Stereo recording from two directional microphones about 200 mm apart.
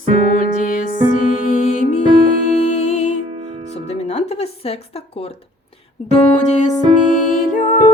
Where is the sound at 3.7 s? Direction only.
35° left (ahead or behind).